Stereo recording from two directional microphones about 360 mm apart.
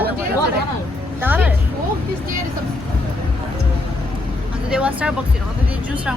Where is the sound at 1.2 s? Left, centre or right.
Centre.